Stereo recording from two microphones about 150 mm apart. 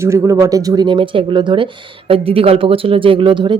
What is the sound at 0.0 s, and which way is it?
Speech, 20° right (ahead or behind).